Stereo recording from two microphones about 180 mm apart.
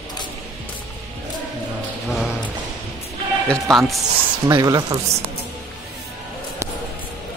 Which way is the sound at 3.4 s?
Centre (ahead or behind).